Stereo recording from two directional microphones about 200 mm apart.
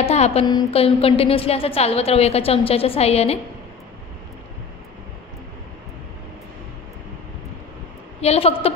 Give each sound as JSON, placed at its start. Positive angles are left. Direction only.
{"t": 0.0, "sound": "a woman's voice", "side_deg": 30}
{"t": 8.2, "sound": "a woman's voice", "side_deg": 30}